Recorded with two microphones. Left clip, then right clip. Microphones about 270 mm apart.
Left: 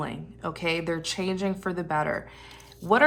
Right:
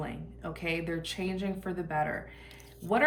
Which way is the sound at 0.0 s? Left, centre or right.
Centre.